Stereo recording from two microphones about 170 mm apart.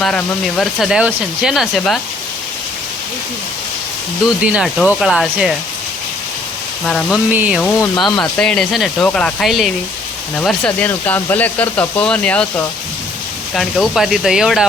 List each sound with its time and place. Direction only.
0.0 s speech: 5° left (ahead or behind)
4.4 s speech: 5° right (ahead or behind)
6.8 s speech: 5° left (ahead or behind)
7.3 s speech: 10° right (ahead or behind)
7.8 s speech: 25° left (ahead or behind)
8.4 s speech: 5° left (ahead or behind)